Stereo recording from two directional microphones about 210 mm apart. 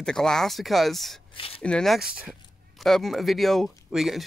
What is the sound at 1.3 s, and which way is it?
Speech, 25° left (ahead or behind).